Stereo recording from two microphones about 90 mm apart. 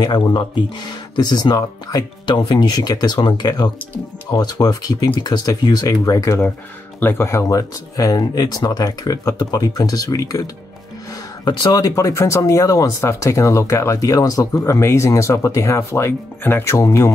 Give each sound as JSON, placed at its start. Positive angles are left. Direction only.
{"t": 0.0, "sound": "speech", "side_deg": 55}
{"t": 7.0, "sound": "speech", "side_deg": 25}